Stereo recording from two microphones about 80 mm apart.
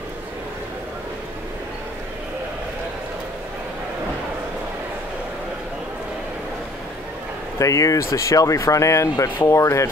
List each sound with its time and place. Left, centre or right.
7.5 s speech: left
9.1 s speech: left
9.5 s speech: left